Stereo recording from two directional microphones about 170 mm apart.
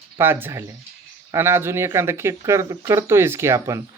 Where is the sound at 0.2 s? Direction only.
15° right (ahead or behind).